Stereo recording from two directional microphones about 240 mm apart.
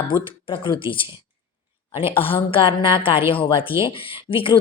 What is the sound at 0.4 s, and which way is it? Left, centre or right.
Speech, left.